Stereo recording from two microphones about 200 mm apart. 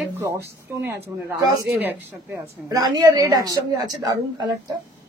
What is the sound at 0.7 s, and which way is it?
A woman's voice, 10° right (ahead or behind).